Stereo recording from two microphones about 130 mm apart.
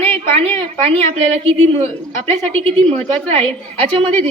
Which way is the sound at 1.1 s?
50° right (ahead or behind).